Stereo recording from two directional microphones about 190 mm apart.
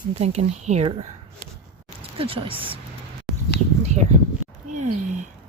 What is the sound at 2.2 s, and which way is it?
Speech, 30° right (ahead or behind).